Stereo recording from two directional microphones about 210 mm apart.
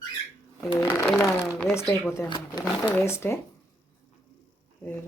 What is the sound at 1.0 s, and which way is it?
Sewing machine, centre (ahead or behind).